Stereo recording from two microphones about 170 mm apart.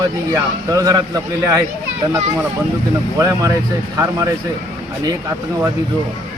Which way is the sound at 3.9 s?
15° right (ahead or behind).